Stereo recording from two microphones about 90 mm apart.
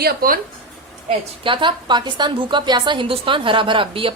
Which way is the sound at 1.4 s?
65° right (ahead or behind).